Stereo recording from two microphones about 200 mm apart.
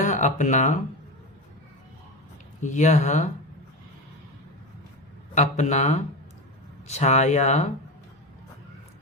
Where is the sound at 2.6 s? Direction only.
35° left (ahead or behind).